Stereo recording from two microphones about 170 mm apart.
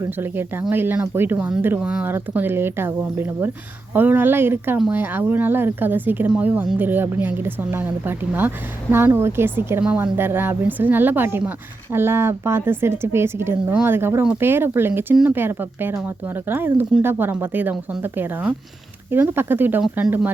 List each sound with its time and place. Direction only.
0.0 s a woman's voice: 15° right (ahead or behind)